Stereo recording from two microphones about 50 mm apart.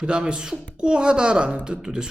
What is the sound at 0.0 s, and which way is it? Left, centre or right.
Speech, centre.